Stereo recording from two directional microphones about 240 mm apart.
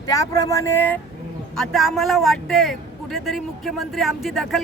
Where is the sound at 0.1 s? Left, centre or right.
Centre.